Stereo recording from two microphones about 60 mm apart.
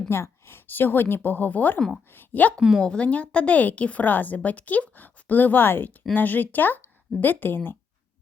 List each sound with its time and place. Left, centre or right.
0.1 s a woman's voice: left
2.8 s a woman's voice: centre